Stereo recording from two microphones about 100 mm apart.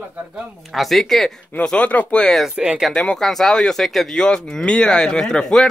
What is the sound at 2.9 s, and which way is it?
Speech, 10° left (ahead or behind).